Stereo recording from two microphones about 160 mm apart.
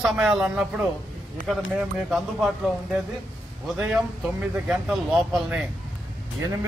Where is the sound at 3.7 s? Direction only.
5° right (ahead or behind).